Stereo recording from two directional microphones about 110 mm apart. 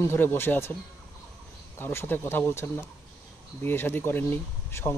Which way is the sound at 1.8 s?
20° left (ahead or behind).